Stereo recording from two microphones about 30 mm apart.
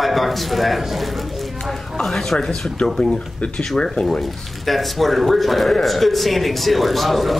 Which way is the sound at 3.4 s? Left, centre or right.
Left.